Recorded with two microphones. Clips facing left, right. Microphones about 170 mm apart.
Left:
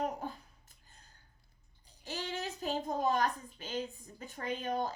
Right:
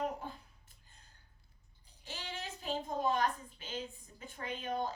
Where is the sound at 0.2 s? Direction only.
45° left (ahead or behind).